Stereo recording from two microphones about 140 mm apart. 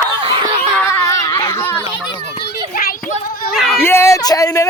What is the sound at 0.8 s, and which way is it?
Children playing, 20° left (ahead or behind).